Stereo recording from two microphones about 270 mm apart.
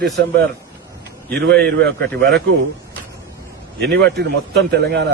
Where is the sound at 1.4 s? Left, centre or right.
Right.